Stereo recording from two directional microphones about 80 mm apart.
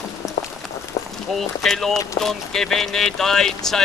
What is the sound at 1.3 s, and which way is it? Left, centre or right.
Speech, centre.